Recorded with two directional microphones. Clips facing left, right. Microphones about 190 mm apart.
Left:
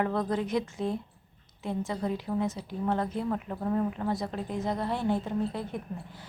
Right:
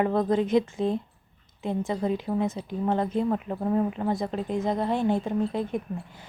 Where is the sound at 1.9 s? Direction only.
20° right (ahead or behind).